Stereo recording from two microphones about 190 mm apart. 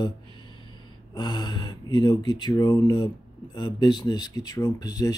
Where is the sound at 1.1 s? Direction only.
20° left (ahead or behind).